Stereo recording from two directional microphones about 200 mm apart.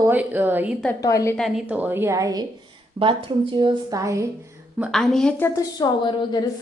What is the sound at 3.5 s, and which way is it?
Speech, 25° right (ahead or behind).